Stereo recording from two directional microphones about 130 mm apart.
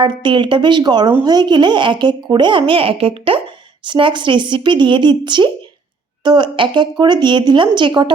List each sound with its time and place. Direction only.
0.0 s speech: 35° right (ahead or behind)